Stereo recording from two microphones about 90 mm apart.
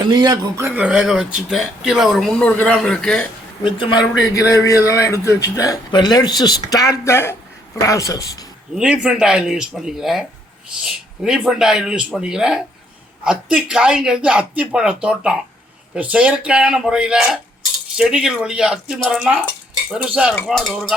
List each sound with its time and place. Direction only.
0.0 s speech: 55° right (ahead or behind)
0.7 s speech: 15° right (ahead or behind)
2.4 s a man's voice: 15° left (ahead or behind)
3.6 s a man's voice: 60° left (ahead or behind)
4.4 s speech: 35° left (ahead or behind)
5.9 s speech: 50° left (ahead or behind)
8.7 s speech: 10° right (ahead or behind)
20.6 s speech: 5° right (ahead or behind)